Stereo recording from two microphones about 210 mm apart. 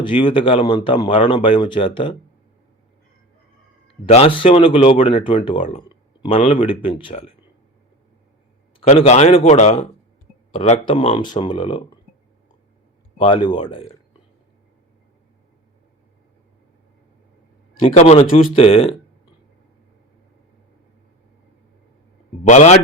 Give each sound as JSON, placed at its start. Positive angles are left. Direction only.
{"t": 0.0, "sound": "speech", "side_deg": 25}
{"t": 3.8, "sound": "speech", "side_deg": 25}
{"t": 8.8, "sound": "speech", "side_deg": 30}
{"t": 13.1, "sound": "speech", "side_deg": 25}
{"t": 17.7, "sound": "speech", "side_deg": 25}
{"t": 22.4, "sound": "speech", "side_deg": 35}